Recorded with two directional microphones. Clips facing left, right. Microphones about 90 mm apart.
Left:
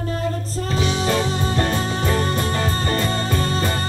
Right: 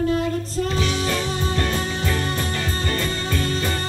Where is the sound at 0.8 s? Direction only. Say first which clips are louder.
Left 3 dB; 25° left (ahead or behind).